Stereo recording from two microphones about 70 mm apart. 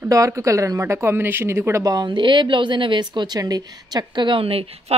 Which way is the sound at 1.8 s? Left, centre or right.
Right.